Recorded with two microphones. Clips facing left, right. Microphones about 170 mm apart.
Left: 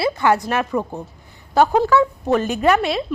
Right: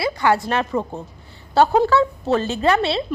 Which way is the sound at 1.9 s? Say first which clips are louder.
Left 1 dB; 15° left (ahead or behind).